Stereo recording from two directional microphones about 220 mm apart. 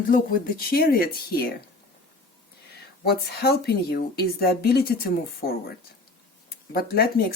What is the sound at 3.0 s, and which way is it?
A woman's voice, 45° left (ahead or behind).